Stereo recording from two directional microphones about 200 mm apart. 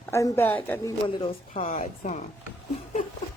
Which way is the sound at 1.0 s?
25° left (ahead or behind).